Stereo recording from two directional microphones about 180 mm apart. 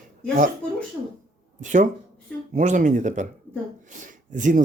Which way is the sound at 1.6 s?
45° right (ahead or behind).